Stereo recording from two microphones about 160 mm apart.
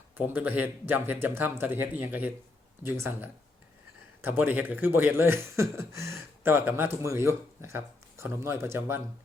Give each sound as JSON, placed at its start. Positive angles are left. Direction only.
{"t": 0.2, "sound": "speech", "side_deg": -10}